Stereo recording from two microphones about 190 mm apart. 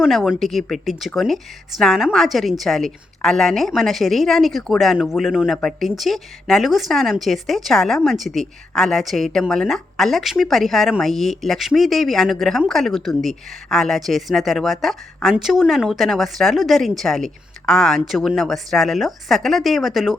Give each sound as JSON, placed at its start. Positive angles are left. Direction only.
{"t": 0.0, "sound": "a woman's voice", "side_deg": 0}